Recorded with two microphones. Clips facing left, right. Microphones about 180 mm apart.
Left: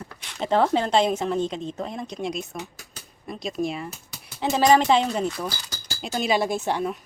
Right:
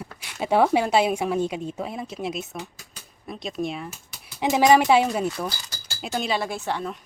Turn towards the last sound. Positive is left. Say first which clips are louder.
# left 4 dB
turn(degrees=15)  # may be behind; listen again after turning